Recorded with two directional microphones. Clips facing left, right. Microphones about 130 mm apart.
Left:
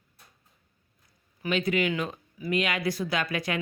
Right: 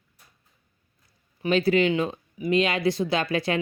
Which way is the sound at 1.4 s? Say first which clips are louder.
Right 6 dB; 35° right (ahead or behind).